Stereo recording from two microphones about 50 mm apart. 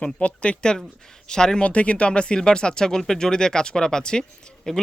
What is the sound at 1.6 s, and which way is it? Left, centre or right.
Speech, left.